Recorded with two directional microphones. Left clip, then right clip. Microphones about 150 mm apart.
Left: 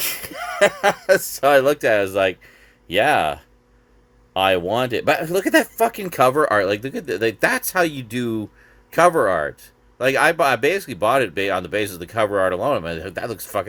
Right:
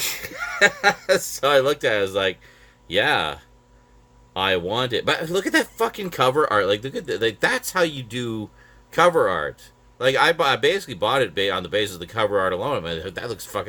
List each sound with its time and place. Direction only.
0.0 s speech: 25° left (ahead or behind)